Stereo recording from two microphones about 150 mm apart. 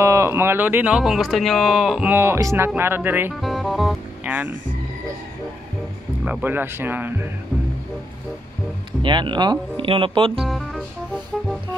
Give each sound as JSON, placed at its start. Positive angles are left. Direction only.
{"t": 0.0, "sound": "speech", "side_deg": -20}
{"t": 3.3, "sound": "speech", "side_deg": 0}
{"t": 4.2, "sound": "speech", "side_deg": -10}
{"t": 6.2, "sound": "speech", "side_deg": -10}
{"t": 9.0, "sound": "speech", "side_deg": -30}
{"t": 10.4, "sound": "speech", "side_deg": 0}